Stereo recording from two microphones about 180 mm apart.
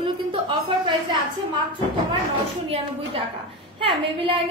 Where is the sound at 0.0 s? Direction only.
30° right (ahead or behind).